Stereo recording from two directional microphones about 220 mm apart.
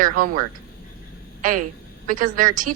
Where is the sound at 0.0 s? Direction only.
40° right (ahead or behind).